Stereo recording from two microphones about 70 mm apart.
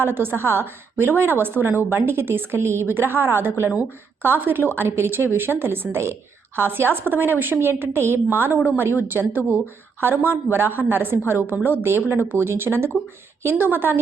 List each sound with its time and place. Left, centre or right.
0.0 s a woman's voice: right